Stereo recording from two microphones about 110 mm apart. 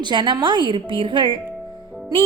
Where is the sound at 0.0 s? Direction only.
45° right (ahead or behind).